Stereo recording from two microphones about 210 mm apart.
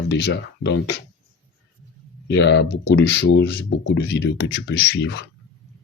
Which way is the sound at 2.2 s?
55° left (ahead or behind).